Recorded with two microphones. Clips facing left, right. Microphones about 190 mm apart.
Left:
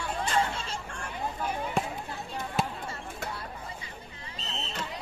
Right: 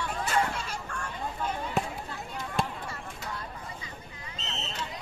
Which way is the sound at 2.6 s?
5° left (ahead or behind).